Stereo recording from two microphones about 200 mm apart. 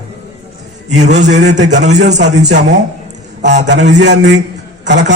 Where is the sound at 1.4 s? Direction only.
60° right (ahead or behind).